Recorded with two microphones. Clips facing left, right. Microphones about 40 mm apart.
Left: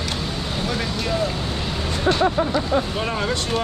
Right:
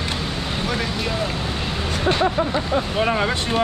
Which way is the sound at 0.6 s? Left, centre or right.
Centre.